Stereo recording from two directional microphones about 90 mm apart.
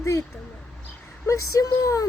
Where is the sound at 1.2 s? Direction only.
40° left (ahead or behind).